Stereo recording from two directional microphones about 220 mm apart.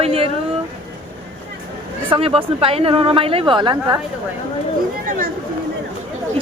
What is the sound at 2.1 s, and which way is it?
Speech, 25° right (ahead or behind).